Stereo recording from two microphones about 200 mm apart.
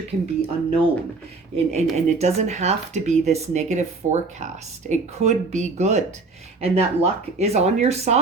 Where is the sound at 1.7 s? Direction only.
35° right (ahead or behind).